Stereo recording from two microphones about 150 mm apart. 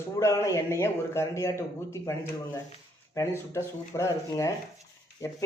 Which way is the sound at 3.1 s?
20° left (ahead or behind).